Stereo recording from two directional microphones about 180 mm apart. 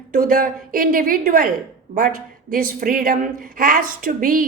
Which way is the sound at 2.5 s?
50° right (ahead or behind).